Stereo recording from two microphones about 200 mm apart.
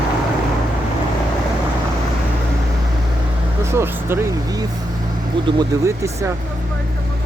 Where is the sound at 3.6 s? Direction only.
10° right (ahead or behind).